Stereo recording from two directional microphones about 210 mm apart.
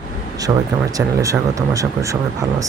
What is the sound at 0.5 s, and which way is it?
Speech, 15° right (ahead or behind).